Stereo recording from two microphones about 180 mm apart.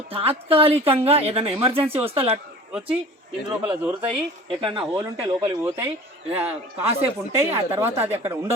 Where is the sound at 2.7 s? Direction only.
5° right (ahead or behind).